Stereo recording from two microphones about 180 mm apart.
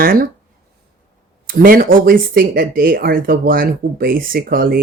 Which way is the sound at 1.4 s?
55° right (ahead or behind).